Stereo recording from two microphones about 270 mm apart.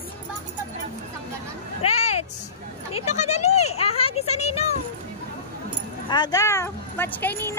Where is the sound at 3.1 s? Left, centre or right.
Left.